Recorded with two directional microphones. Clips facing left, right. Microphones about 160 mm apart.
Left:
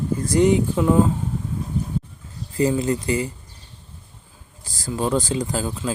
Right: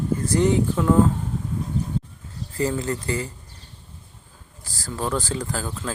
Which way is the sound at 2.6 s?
15° left (ahead or behind).